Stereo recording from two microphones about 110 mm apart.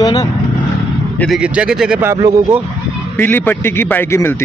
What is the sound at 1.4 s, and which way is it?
Speech, 10° right (ahead or behind).